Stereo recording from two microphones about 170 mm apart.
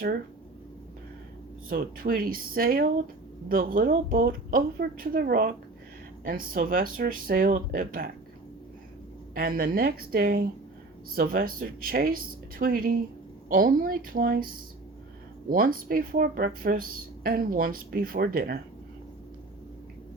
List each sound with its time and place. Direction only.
1.7 s speech: 60° right (ahead or behind)
9.3 s speech: 60° right (ahead or behind)
15.4 s speech: 55° right (ahead or behind)